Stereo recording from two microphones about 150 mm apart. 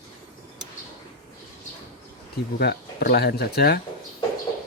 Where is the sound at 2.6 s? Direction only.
90° left.